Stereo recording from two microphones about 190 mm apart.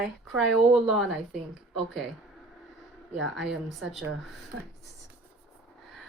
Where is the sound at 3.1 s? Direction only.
Centre (ahead or behind).